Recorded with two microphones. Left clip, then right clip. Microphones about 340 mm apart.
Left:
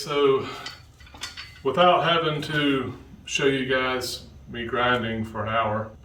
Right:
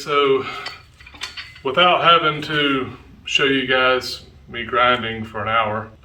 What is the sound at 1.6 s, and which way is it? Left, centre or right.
A man's voice, centre.